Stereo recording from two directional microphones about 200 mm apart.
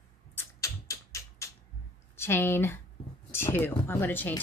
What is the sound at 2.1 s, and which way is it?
A woman's voice, 10° left (ahead or behind).